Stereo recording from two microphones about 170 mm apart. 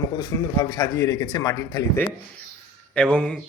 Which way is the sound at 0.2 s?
20° left (ahead or behind).